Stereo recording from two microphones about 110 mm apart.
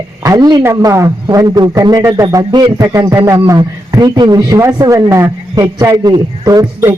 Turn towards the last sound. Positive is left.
turn(degrees=-30)  # may be behind; listen again after turning